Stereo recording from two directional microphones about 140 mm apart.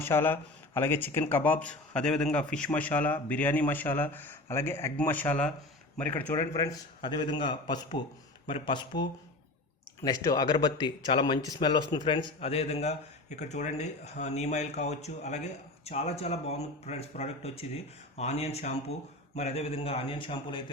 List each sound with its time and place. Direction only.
0.0 s speech: 15° left (ahead or behind)
6.3 s a man's voice: 25° left (ahead or behind)